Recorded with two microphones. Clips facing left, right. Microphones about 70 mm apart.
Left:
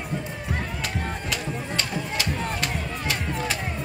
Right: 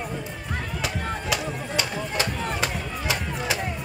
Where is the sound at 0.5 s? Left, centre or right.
Centre.